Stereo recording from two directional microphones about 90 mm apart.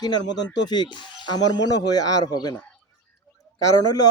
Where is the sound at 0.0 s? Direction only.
50° left (ahead or behind).